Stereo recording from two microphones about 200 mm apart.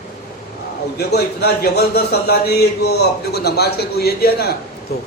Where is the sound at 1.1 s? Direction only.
50° left (ahead or behind).